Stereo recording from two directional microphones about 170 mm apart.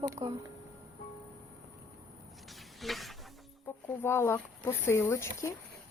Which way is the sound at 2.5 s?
Centre (ahead or behind).